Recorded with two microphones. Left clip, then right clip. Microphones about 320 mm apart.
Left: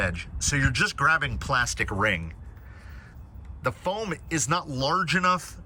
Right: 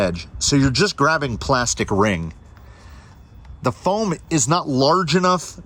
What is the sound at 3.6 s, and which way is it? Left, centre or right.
Speech, centre.